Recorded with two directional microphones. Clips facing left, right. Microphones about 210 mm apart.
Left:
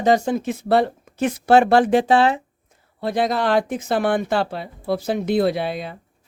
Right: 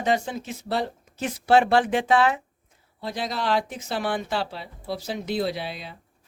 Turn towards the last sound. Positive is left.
turn(degrees=55)  # may be behind; listen again after turning